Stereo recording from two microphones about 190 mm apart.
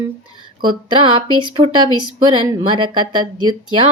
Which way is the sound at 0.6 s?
25° right (ahead or behind).